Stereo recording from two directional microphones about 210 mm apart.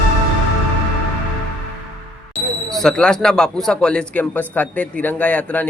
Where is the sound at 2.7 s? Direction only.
5° left (ahead or behind).